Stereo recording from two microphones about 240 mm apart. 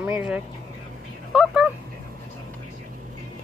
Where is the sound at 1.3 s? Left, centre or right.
Centre.